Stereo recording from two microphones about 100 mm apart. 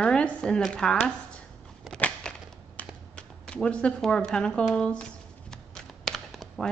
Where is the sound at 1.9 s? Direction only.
10° left (ahead or behind).